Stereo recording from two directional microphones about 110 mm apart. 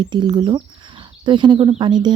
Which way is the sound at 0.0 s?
45° right (ahead or behind).